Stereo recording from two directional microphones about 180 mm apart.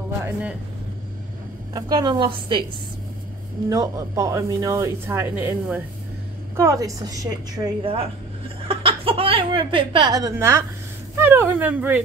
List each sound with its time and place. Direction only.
0.2 s speech: 5° right (ahead or behind)
1.7 s a woman's voice: 20° right (ahead or behind)
3.6 s a woman's voice: 20° right (ahead or behind)